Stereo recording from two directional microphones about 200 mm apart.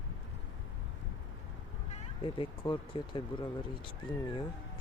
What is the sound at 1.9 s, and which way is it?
Speech, 25° left (ahead or behind).